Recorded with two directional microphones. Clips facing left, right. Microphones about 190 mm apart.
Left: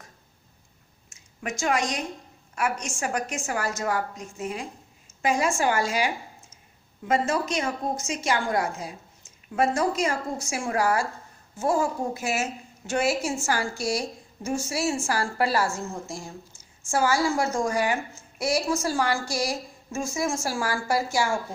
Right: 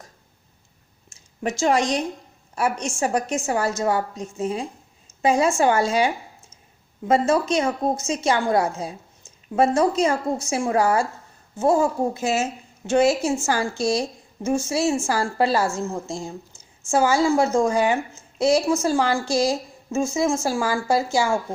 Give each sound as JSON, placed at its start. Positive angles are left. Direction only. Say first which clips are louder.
{"t": 1.1, "sound": "a woman's voice", "louder": "right 7 dB", "side_deg": -30}
{"t": 7.1, "sound": "a woman's voice", "louder": "right 6 dB", "side_deg": -25}